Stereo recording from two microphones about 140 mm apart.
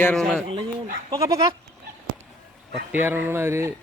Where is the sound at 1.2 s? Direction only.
25° right (ahead or behind).